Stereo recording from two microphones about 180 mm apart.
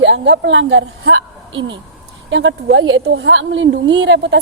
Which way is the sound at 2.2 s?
90° right.